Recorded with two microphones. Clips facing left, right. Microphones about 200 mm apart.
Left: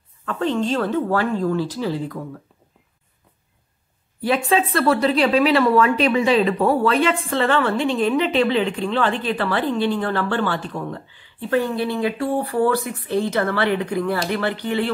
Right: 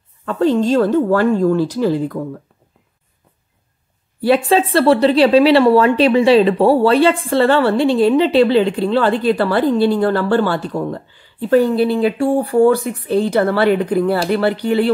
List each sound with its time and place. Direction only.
0.2 s speech: 35° right (ahead or behind)
4.5 s a woman's voice: 30° right (ahead or behind)